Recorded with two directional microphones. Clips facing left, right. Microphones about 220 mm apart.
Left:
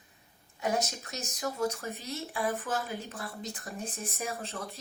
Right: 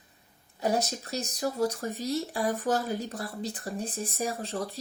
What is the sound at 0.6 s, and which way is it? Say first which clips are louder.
Speech: right 3 dB; 35° right (ahead or behind).